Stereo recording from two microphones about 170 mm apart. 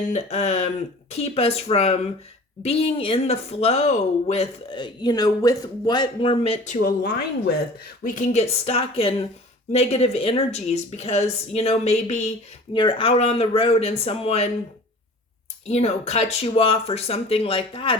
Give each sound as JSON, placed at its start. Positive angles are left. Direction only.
{"t": 0.1, "sound": "speech", "side_deg": 40}
{"t": 6.8, "sound": "a woman's voice", "side_deg": 60}
{"t": 8.0, "sound": "speech", "side_deg": 45}
{"t": 12.7, "sound": "speech", "side_deg": 30}
{"t": 15.6, "sound": "speech", "side_deg": 40}